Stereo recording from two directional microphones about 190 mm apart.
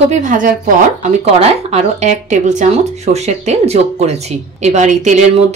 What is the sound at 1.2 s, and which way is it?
Speech, 30° right (ahead or behind).